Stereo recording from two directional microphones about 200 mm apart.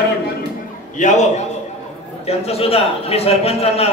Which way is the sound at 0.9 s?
35° left (ahead or behind).